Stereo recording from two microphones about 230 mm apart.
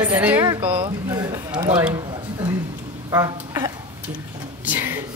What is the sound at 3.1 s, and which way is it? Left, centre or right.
A woman's voice, centre.